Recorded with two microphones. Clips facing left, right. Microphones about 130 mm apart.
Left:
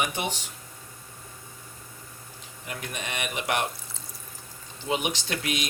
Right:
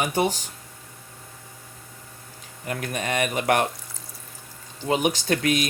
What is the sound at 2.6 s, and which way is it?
Speech, 50° right (ahead or behind).